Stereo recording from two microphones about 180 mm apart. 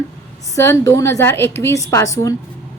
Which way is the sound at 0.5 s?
15° left (ahead or behind).